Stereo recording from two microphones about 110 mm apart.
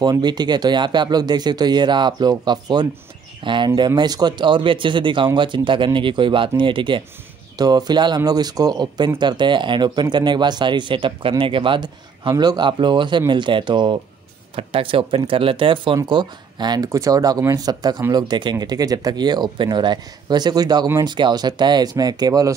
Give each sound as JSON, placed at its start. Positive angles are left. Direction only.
{"t": 0.0, "sound": "speech", "side_deg": -40}
{"t": 7.5, "sound": "speech", "side_deg": -40}